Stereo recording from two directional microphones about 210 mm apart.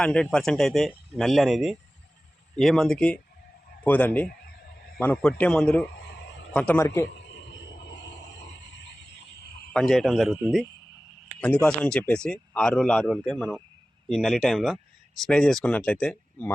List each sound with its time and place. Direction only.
0.0 s a man's voice: 5° left (ahead or behind)
4.3 s fowl: 45° left (ahead or behind)
4.9 s a man's voice: 5° left (ahead or behind)
6.0 s a sound: 55° left (ahead or behind)
6.5 s a man's voice: 5° left (ahead or behind)
7.1 s a sound: 55° left (ahead or behind)
9.7 s speech: centre (ahead or behind)